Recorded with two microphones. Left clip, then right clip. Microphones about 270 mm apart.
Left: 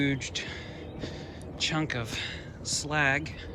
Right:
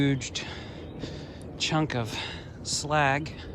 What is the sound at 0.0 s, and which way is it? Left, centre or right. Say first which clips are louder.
Speech: right 1 dB; centre.